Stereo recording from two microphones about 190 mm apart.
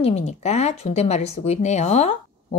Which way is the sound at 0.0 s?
35° left (ahead or behind).